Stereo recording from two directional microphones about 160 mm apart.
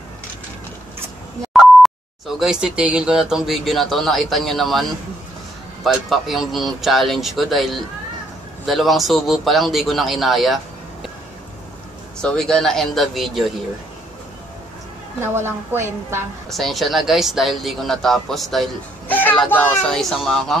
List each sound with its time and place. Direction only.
1.5 s beep: centre (ahead or behind)
2.6 s speech: 5° right (ahead or behind)
5.9 s speech: centre (ahead or behind)
12.2 s speech: 5° left (ahead or behind)
15.1 s a woman's voice: 15° right (ahead or behind)
16.4 s speech: centre (ahead or behind)